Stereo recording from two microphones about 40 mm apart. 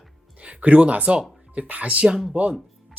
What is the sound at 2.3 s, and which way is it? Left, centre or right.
Speech, right.